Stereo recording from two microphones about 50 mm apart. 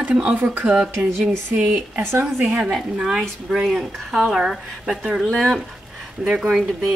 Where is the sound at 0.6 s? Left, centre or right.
Centre.